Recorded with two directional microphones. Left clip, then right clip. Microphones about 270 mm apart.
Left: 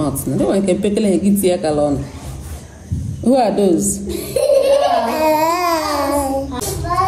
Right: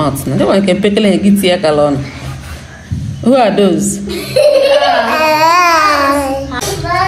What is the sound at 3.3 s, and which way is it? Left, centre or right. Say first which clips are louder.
Speech: right 5 dB; right.